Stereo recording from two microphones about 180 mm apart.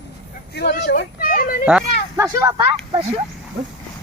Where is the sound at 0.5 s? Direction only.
70° left (ahead or behind); by 1.6 s 50° left (ahead or behind).